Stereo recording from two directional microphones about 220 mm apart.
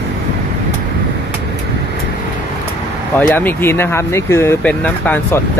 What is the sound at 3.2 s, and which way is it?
Speech, 10° left (ahead or behind).